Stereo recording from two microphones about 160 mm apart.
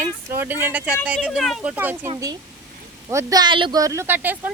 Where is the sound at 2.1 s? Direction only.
25° right (ahead or behind).